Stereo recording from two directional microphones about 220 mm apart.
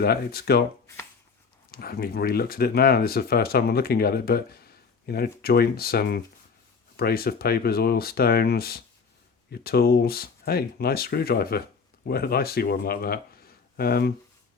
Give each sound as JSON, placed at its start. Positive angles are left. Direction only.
{"t": 0.0, "sound": "speech", "side_deg": 45}
{"t": 1.7, "sound": "speech", "side_deg": 45}